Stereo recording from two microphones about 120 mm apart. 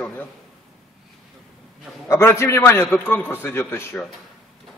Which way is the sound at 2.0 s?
20° left (ahead or behind).